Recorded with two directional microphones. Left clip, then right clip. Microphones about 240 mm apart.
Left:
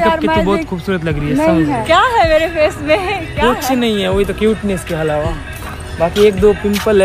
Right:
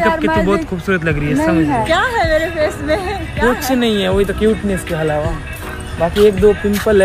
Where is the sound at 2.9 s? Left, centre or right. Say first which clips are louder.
Left 3 dB; centre.